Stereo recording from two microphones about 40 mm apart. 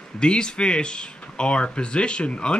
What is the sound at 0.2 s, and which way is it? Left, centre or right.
Speech, left.